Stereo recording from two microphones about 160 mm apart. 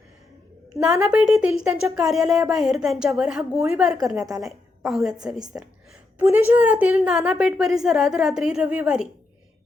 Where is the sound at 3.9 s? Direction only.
20° right (ahead or behind).